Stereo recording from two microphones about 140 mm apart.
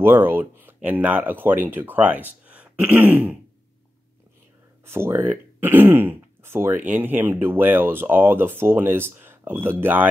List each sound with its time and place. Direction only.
0.0 s speech: 15° right (ahead or behind)
4.8 s speech: 15° right (ahead or behind)